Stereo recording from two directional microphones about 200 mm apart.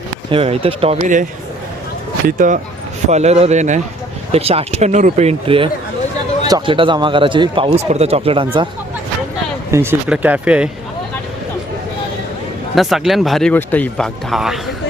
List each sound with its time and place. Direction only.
0.3 s speech: 30° right (ahead or behind)
2.2 s speech: 40° right (ahead or behind)
9.7 s speech: 10° right (ahead or behind)
12.7 s speech: centre (ahead or behind)